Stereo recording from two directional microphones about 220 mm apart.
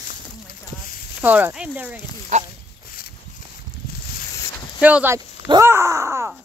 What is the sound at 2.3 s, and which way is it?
Speech, 30° right (ahead or behind).